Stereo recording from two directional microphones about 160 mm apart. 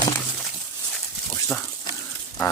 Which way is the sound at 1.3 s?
10° left (ahead or behind).